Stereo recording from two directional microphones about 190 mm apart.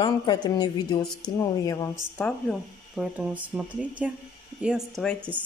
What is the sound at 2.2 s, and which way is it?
Speech, 5° left (ahead or behind).